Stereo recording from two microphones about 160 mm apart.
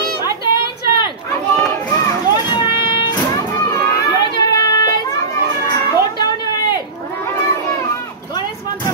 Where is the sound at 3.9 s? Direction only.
25° left (ahead or behind).